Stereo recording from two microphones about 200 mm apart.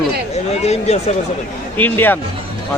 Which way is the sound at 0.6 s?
30° left (ahead or behind).